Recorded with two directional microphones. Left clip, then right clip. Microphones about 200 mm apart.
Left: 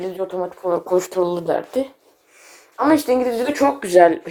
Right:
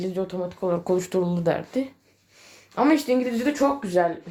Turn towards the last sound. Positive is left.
turn(degrees=50)  # may be behind; listen again after turning